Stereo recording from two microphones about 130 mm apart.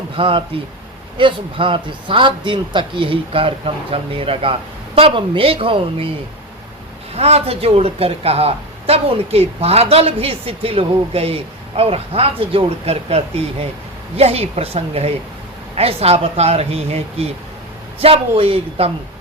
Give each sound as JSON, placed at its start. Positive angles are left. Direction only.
{"t": 0.2, "sound": "speech", "side_deg": -40}
{"t": 7.1, "sound": "speech", "side_deg": -55}